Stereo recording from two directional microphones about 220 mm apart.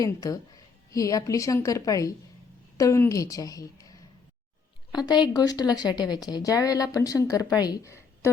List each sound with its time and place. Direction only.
0.0 s a woman's voice: 15° left (ahead or behind)